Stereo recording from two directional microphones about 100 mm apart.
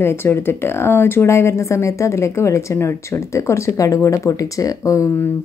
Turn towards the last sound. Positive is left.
turn(degrees=35)  # may be behind; listen again after turning